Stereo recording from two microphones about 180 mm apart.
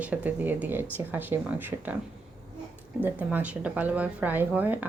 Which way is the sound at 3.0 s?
10° right (ahead or behind).